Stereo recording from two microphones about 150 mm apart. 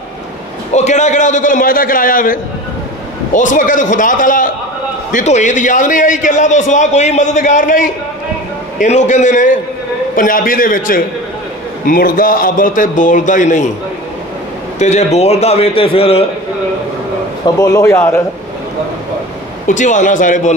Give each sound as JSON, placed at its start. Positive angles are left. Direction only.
{"t": 0.7, "sound": "a man's voice", "side_deg": 50}
{"t": 14.8, "sound": "a man's voice", "side_deg": 50}
{"t": 17.6, "sound": "a man's voice", "side_deg": 20}
{"t": 19.7, "sound": "a man's voice", "side_deg": 55}